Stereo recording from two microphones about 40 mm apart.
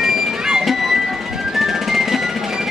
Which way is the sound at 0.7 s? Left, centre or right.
Centre.